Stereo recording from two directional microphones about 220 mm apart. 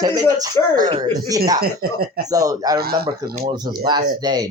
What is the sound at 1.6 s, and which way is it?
Speech, 45° right (ahead or behind).